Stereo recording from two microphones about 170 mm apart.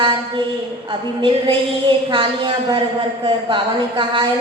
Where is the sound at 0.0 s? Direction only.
30° right (ahead or behind).